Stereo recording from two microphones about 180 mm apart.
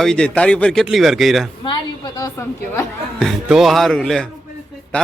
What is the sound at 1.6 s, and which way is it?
A woman's voice, 20° left (ahead or behind).